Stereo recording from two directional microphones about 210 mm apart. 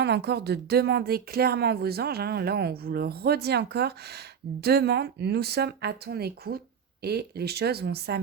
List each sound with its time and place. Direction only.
0.0 s speech: 50° right (ahead or behind)